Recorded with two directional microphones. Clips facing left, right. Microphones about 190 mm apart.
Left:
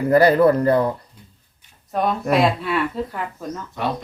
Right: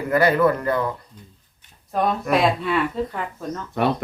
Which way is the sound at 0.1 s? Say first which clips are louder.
Left 4 dB; 35° left (ahead or behind).